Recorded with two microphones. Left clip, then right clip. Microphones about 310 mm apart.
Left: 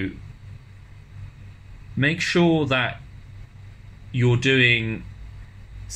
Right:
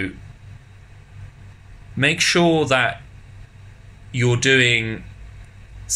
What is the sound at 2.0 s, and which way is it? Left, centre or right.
Speech, centre.